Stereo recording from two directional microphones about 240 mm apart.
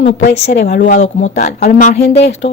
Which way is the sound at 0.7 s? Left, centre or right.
Left.